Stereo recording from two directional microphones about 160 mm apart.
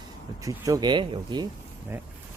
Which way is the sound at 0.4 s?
20° right (ahead or behind).